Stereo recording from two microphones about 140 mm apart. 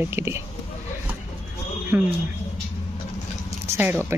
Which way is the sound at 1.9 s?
15° right (ahead or behind).